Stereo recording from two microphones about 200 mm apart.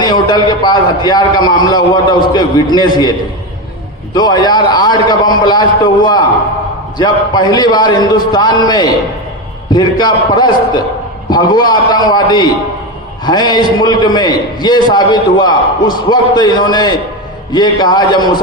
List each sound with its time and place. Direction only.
0.0 s a man's voice: 20° left (ahead or behind)